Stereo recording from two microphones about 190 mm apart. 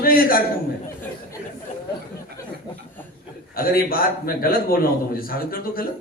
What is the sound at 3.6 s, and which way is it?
A man's voice, 50° left (ahead or behind).